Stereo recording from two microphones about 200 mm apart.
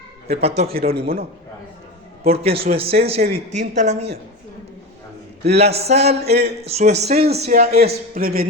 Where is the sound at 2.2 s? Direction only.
30° right (ahead or behind).